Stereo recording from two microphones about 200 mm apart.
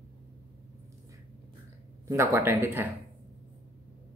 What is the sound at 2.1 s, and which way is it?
Speech, 10° right (ahead or behind).